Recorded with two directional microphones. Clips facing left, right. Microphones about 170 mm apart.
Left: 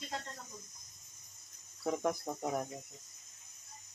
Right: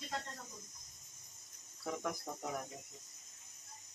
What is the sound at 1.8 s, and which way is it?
Speech, 35° left (ahead or behind).